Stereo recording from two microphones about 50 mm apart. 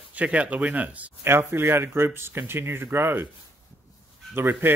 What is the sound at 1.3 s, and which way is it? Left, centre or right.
Speech, right.